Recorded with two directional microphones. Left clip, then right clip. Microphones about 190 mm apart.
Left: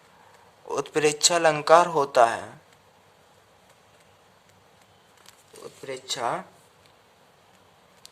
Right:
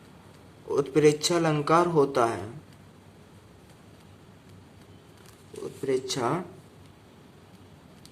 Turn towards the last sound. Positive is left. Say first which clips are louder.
# right 1 dB
turn(degrees=20)  # may be behind; listen again after turning